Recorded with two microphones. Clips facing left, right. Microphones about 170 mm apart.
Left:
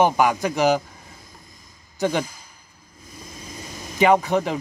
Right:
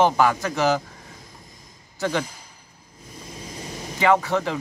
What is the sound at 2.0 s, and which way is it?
Speech, 15° left (ahead or behind).